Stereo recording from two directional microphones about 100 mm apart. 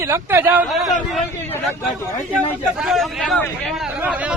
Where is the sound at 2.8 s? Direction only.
Centre (ahead or behind).